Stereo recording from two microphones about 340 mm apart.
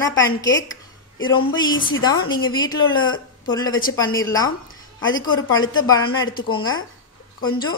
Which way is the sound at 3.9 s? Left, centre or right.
Centre.